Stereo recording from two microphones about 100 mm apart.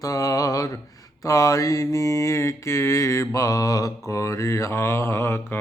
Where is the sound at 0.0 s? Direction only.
35° left (ahead or behind).